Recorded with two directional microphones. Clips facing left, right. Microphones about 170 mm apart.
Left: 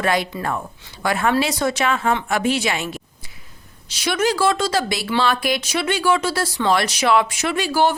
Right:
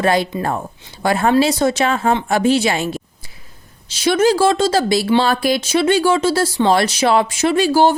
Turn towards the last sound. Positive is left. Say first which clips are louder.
# right 6 dB
turn(degrees=-30)  # may be behind; listen again after turning